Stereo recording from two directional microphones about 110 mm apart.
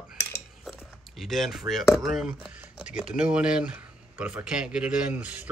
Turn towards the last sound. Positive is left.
turn(degrees=-15)  # may be behind; listen again after turning